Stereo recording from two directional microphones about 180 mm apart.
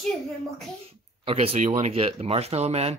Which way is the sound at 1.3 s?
35° right (ahead or behind).